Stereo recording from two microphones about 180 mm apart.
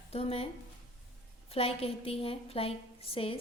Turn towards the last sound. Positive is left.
turn(degrees=30)  # may be behind; listen again after turning